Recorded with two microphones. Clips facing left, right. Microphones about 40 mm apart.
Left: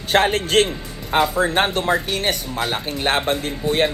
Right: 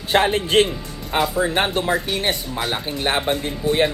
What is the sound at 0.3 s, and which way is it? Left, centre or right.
Speech, right.